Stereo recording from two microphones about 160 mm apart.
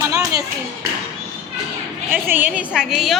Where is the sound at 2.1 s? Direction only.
10° right (ahead or behind).